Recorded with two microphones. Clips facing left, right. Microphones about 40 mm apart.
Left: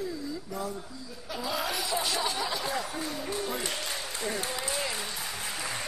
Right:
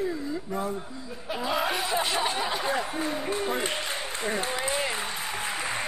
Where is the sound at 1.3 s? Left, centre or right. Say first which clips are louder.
Right 5 dB; right.